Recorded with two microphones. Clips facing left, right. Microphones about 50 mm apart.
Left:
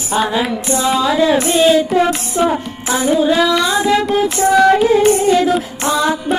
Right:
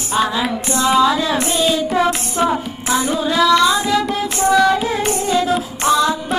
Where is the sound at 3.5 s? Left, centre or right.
Centre.